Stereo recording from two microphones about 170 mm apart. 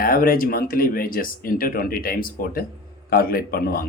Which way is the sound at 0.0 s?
55° left (ahead or behind).